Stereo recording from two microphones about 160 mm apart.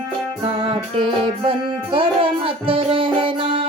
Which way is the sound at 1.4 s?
35° right (ahead or behind).